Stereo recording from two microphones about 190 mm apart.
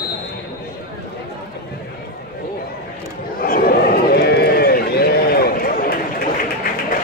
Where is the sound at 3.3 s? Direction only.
50° left (ahead or behind).